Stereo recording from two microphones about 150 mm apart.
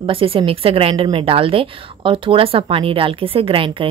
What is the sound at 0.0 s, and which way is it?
Speech, 35° right (ahead or behind).